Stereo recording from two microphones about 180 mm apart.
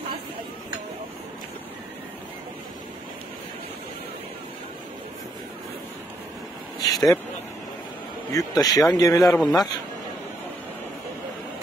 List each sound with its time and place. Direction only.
6.8 s vehicle: 20° left (ahead or behind)
8.3 s speech: 20° left (ahead or behind)
9.4 s a man's voice: centre (ahead or behind)